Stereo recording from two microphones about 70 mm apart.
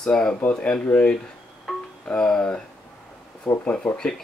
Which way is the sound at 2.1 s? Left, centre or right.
Centre.